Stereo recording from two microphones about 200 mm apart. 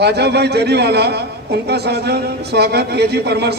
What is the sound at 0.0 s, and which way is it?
A man's voice, 55° right (ahead or behind).